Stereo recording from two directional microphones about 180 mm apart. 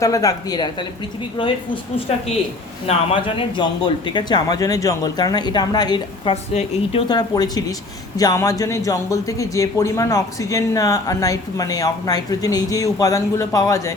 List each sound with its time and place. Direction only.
0.0 s a man's voice: 20° left (ahead or behind)
6.3 s a woman's voice: 35° left (ahead or behind)
7.1 s a man's voice: 20° left (ahead or behind)